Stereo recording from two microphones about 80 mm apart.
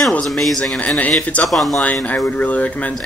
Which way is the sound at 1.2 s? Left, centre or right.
Centre.